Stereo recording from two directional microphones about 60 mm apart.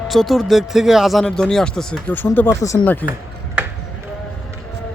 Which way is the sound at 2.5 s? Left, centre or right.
Left.